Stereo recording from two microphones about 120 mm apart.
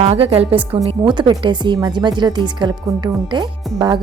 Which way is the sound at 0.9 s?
40° right (ahead or behind).